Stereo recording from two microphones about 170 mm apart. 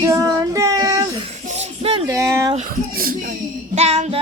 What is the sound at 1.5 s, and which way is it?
Music, 40° right (ahead or behind).